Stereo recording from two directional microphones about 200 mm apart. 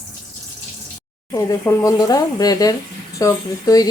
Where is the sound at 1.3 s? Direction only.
15° left (ahead or behind).